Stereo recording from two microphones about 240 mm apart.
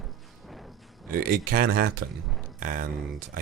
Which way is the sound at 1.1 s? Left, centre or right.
Right.